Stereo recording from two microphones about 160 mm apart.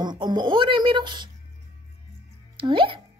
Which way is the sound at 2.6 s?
30° right (ahead or behind).